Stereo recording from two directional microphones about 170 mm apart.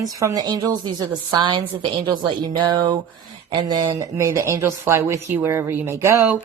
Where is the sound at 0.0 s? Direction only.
20° right (ahead or behind).